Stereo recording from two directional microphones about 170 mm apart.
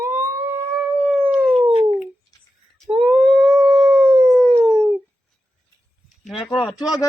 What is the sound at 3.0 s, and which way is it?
Howl, centre (ahead or behind).